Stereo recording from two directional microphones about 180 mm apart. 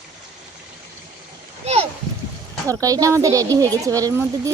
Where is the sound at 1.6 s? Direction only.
35° right (ahead or behind).